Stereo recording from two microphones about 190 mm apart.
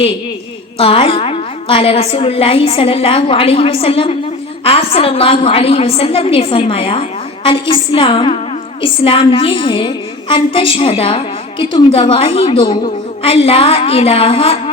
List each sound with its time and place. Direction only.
0.8 s a woman's voice: 30° left (ahead or behind)